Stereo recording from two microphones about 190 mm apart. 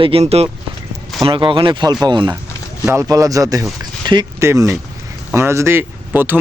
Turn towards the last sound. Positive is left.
turn(degrees=-10)  # may be behind; listen again after turning